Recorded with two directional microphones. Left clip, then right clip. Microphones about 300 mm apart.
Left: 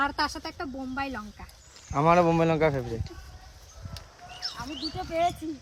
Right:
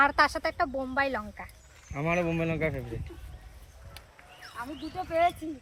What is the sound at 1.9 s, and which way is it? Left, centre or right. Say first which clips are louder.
Speech: left 8 dB; centre.